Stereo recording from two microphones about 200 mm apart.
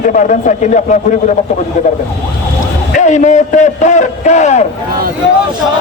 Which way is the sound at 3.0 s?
35° left (ahead or behind).